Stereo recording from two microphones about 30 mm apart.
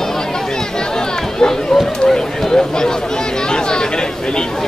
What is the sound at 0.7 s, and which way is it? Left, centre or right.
Chatter, left.